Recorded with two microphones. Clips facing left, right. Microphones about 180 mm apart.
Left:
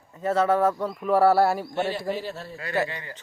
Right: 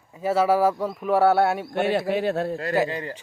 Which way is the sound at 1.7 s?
60° right (ahead or behind).